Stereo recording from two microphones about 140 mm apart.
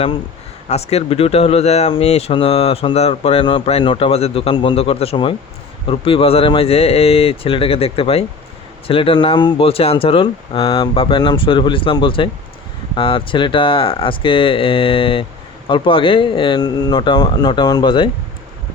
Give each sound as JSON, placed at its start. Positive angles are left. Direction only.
{"t": 0.7, "sound": "speech", "side_deg": 50}